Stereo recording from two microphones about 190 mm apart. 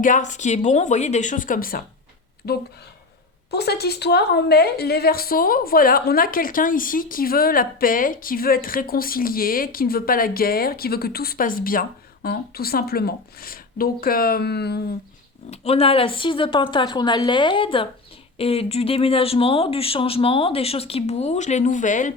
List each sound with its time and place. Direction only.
0.0 s a woman's voice: 40° left (ahead or behind); by 14.8 s 60° left (ahead or behind)
15.4 s speech: 30° left (ahead or behind)